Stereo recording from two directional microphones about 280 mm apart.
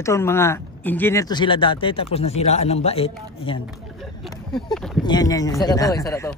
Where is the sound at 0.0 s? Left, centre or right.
Centre.